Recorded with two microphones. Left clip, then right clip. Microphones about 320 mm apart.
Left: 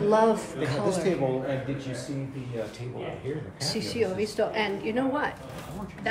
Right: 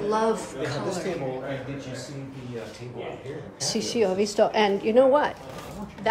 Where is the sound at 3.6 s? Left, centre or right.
Centre.